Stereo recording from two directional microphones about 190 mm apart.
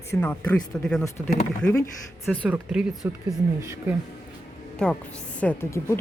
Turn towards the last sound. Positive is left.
turn(degrees=10)  # may be behind; listen again after turning